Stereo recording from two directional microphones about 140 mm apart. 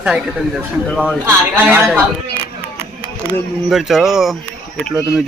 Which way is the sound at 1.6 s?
10° right (ahead or behind).